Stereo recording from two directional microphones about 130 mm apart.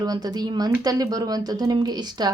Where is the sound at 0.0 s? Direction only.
30° right (ahead or behind).